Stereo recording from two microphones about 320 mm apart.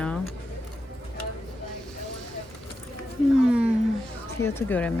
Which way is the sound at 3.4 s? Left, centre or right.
Centre.